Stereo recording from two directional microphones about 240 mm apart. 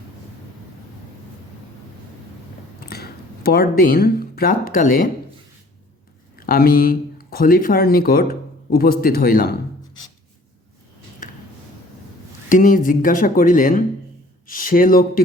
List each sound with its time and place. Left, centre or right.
2.9 s speech: left
6.4 s speech: left
12.5 s speech: left